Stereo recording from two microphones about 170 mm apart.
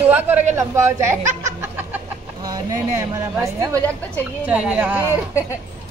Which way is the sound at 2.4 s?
20° right (ahead or behind).